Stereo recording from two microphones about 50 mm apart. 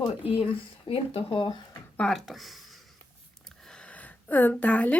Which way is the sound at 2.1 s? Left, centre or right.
Centre.